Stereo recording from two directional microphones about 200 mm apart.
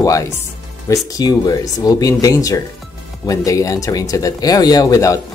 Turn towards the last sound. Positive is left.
turn(degrees=15)  # may be behind; listen again after turning